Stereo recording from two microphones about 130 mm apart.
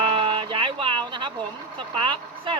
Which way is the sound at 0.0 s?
40° right (ahead or behind).